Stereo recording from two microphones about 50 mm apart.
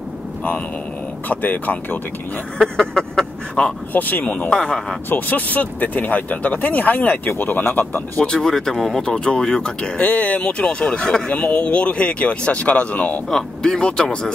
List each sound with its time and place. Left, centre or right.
1.3 s speech: left
2.6 s speech: centre
3.9 s speech: left
4.5 s speech: centre
5.1 s speech: left
8.4 s speech: centre
9.9 s speech: left
10.6 s speech: centre
13.3 s speech: centre